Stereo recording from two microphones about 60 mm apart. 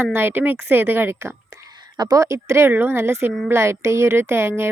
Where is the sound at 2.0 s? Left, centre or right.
Right.